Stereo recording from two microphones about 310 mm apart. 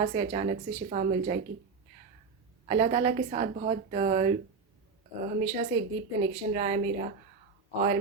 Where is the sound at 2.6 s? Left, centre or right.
Right.